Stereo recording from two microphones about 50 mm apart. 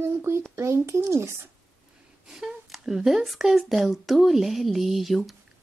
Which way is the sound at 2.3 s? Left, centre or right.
Centre.